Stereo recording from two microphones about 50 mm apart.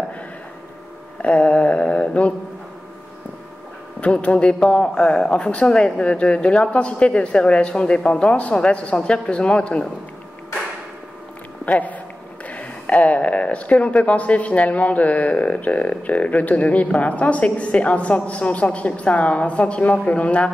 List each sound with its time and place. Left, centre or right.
1.2 s mantra: left
4.0 s speech: left
11.6 s speech: left